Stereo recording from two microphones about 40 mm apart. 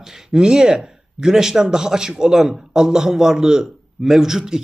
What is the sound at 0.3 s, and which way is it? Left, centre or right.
A man's voice, centre.